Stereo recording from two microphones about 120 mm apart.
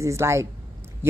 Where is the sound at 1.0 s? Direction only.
20° right (ahead or behind).